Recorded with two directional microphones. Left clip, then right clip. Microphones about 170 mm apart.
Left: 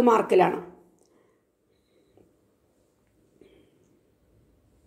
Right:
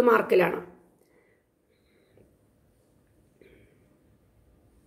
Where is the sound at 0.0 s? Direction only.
15° left (ahead or behind).